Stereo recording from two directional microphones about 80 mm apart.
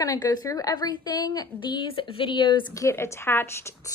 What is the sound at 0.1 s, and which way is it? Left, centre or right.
A woman's voice, left.